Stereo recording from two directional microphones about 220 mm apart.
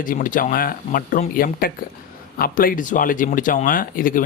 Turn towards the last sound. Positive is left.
turn(degrees=40)  # may be behind; listen again after turning